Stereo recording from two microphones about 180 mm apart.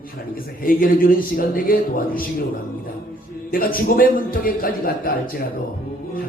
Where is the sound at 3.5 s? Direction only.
55° left (ahead or behind).